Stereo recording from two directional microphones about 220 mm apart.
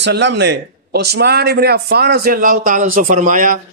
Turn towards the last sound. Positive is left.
turn(degrees=-35)  # may be behind; listen again after turning